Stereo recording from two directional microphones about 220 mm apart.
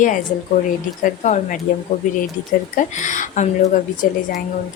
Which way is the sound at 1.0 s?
35° left (ahead or behind).